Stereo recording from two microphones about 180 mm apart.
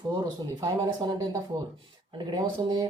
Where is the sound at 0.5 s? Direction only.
20° right (ahead or behind).